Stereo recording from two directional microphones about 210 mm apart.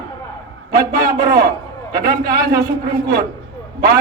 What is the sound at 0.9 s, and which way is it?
A man's voice, 45° right (ahead or behind).